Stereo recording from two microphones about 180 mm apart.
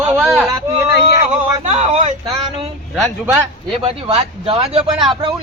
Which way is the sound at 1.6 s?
40° right (ahead or behind).